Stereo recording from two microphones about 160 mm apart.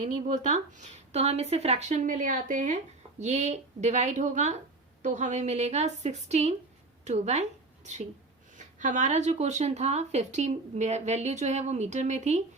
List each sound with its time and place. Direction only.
0.0 s a woman's voice: 50° right (ahead or behind)
8.5 s speech: 50° right (ahead or behind)